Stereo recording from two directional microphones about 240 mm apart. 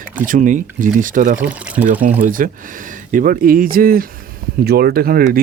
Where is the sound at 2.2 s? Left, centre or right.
Right.